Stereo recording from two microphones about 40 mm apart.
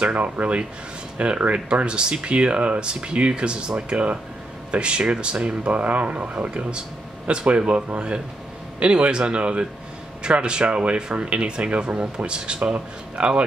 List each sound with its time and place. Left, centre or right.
0.0 s speech: right